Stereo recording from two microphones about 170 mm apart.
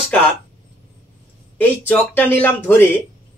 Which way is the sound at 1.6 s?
10° left (ahead or behind).